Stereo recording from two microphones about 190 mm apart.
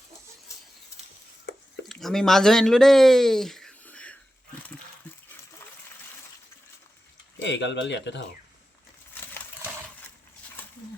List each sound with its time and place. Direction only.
1.5 s a sound: 60° left (ahead or behind)
1.9 s speech: centre (ahead or behind)
7.4 s speech: 70° left (ahead or behind)